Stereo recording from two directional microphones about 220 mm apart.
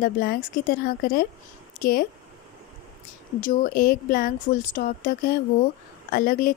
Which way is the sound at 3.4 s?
40° left (ahead or behind).